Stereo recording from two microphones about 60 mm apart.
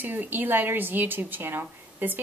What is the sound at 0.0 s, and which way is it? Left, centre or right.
A woman's voice, right.